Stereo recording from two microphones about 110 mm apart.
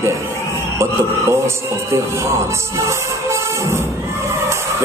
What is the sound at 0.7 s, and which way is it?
Speech, 25° right (ahead or behind).